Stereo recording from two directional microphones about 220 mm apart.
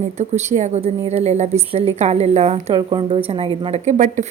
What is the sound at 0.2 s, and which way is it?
A woman's voice, 30° right (ahead or behind).